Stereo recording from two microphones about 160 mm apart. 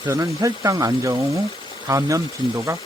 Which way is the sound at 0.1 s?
20° right (ahead or behind).